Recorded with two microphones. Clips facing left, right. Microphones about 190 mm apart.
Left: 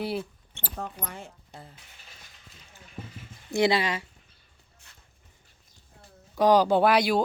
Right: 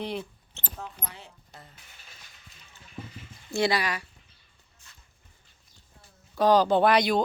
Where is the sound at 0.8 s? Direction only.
55° left (ahead or behind).